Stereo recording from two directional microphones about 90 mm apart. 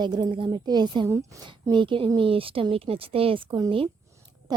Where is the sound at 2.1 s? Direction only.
85° right.